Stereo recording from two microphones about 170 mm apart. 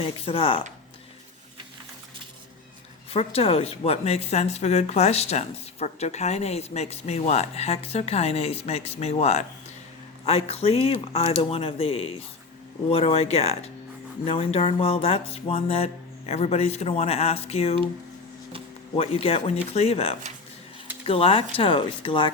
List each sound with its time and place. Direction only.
0.0 s speech: 35° left (ahead or behind)
3.1 s speech: 35° left (ahead or behind)
18.9 s speech: 35° left (ahead or behind)